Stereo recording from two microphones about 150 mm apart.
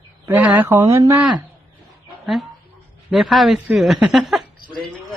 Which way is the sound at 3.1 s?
Centre (ahead or behind).